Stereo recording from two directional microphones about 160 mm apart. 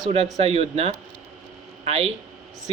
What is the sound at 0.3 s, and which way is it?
Speech, 40° right (ahead or behind).